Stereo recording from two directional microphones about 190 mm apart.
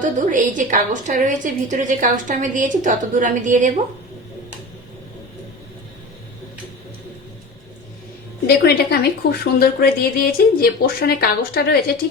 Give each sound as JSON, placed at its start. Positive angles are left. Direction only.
{"t": 0.0, "sound": "a woman's voice", "side_deg": -45}
{"t": 8.4, "sound": "a woman's voice", "side_deg": 55}